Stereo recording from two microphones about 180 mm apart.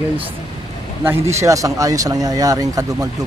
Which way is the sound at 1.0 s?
15° right (ahead or behind).